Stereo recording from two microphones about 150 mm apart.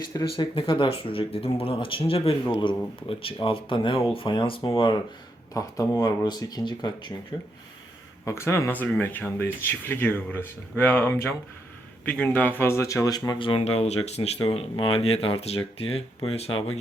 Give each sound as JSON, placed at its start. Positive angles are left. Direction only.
{"t": 0.1, "sound": "speech", "side_deg": 25}
{"t": 5.5, "sound": "speech", "side_deg": 25}
{"t": 8.2, "sound": "speech", "side_deg": 20}